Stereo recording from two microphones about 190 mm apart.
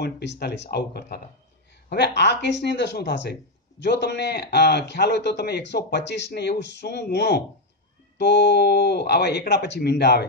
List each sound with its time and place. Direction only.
0.0 s a man's voice: 60° left (ahead or behind)